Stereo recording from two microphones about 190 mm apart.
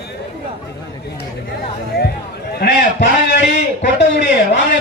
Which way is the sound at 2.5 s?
65° left (ahead or behind).